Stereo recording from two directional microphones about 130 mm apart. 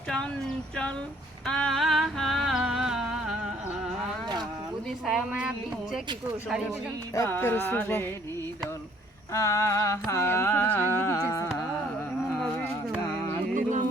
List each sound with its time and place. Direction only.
1.5 s a sound: 5° left (ahead or behind)
5.1 s speech: 10° right (ahead or behind)
7.3 s music: 15° left (ahead or behind)
9.3 s a sound: 25° left (ahead or behind)
11.3 s carnatic music: 25° left (ahead or behind)
13.5 s music: 80° right